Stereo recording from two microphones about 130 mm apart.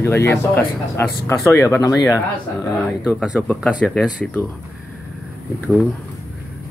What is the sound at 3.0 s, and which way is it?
Speech, 5° right (ahead or behind).